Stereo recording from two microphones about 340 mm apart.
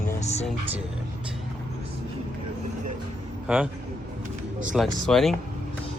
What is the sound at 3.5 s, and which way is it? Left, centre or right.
Speech, centre.